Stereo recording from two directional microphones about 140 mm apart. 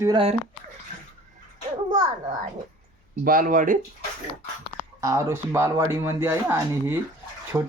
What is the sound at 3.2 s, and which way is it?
Speech, 80° right.